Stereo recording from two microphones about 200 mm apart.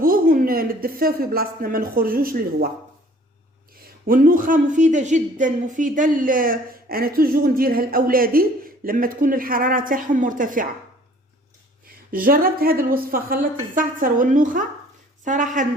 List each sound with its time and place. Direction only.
0.0 s a woman's voice: 45° right (ahead or behind)
4.0 s a woman's voice: 45° right (ahead or behind)
11.9 s a woman's voice: 45° right (ahead or behind)